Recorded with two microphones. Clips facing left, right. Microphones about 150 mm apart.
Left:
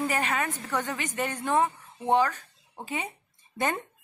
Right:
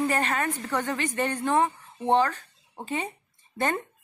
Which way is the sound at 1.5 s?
15° right (ahead or behind).